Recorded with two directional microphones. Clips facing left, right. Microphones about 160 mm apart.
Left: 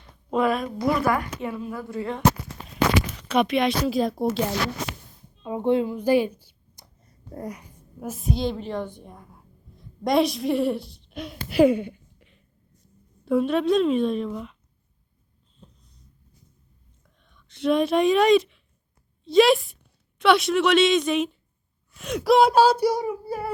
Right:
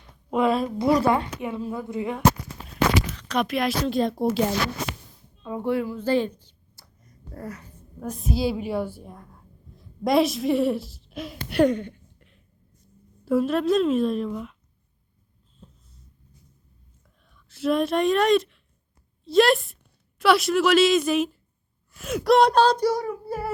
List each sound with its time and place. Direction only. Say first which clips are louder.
0.4 s a woman's voice: right 3 dB; 25° right (ahead or behind)
3.2 s speech: left 3 dB; 5° left (ahead or behind)
5.4 s a sound: left 3 dB; 20° left (ahead or behind)
7.0 s a sound: left 3 dB; 30° left (ahead or behind)
7.4 s a woman's voice: even; 15° left (ahead or behind)
13.2 s speech: even; centre (ahead or behind)
17.2 s speech: left 1 dB; 5° right (ahead or behind)